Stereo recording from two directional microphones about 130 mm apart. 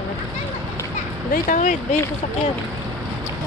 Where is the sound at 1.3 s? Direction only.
80° left.